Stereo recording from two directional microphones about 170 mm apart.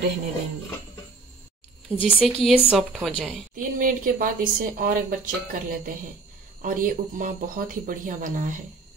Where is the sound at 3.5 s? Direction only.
55° right (ahead or behind).